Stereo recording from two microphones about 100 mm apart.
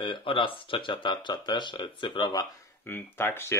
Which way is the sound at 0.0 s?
55° left (ahead or behind).